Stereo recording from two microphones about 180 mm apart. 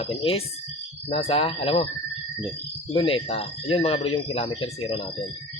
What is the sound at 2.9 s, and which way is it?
Speech, 30° left (ahead or behind).